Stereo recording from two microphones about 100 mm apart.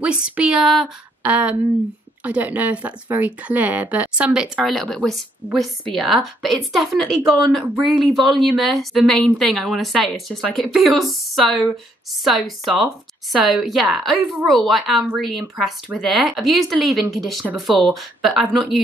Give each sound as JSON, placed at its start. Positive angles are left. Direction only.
{"t": 0.0, "sound": "speech", "side_deg": -10}
{"t": 1.2, "sound": "speech", "side_deg": -15}
{"t": 4.6, "sound": "speech", "side_deg": 5}